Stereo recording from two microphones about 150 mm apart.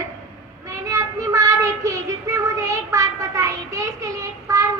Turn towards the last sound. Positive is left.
turn(degrees=-20)  # may be behind; listen again after turning